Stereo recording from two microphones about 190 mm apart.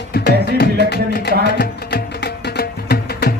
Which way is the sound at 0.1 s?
55° left (ahead or behind).